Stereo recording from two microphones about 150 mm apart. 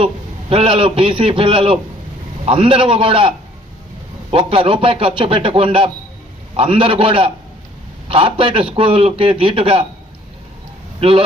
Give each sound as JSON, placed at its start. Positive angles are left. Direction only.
{"t": 0.5, "sound": "a man's voice", "side_deg": -40}